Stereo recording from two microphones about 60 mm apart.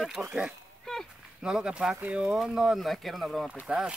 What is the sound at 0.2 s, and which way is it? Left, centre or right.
Speech, centre.